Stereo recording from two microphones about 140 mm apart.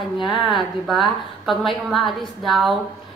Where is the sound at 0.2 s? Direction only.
30° left (ahead or behind).